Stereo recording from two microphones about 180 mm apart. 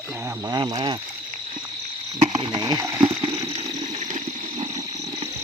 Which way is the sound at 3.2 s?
20° right (ahead or behind).